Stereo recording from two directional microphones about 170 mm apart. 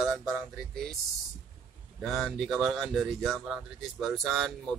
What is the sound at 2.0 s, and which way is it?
Speech, centre (ahead or behind).